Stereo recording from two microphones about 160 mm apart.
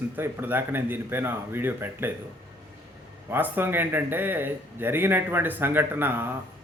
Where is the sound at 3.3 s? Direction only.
15° right (ahead or behind).